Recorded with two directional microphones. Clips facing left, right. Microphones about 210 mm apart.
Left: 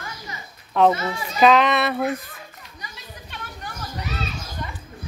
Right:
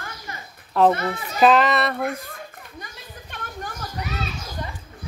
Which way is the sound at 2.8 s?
50° right (ahead or behind).